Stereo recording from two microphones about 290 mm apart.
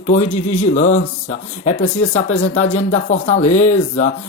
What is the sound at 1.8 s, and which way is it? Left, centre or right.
Speech, left.